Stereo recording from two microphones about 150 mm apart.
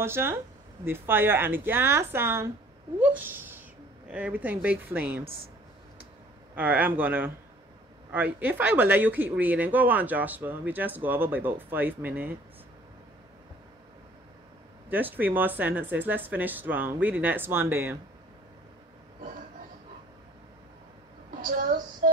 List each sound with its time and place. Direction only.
0.0 s speech: 15° right (ahead or behind)
3.0 s a sound: 10° right (ahead or behind)
4.1 s speech: 10° right (ahead or behind)
6.5 s speech: 10° right (ahead or behind)
14.9 s speech: 10° right (ahead or behind)
21.4 s a woman's voice: 65° right (ahead or behind)